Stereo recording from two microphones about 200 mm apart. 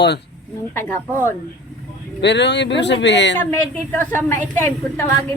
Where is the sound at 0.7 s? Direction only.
10° left (ahead or behind).